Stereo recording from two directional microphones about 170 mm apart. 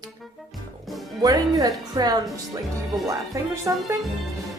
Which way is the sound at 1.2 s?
20° right (ahead or behind).